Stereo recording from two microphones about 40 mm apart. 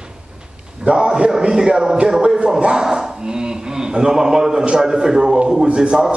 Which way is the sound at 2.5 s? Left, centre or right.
Centre.